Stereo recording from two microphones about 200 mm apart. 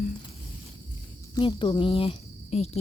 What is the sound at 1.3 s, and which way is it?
Speech, 25° left (ahead or behind).